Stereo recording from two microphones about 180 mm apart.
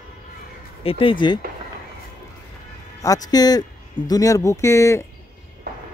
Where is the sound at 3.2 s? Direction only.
20° left (ahead or behind).